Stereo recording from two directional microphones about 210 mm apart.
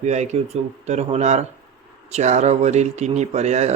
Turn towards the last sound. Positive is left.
turn(degrees=-30)  # may be behind; listen again after turning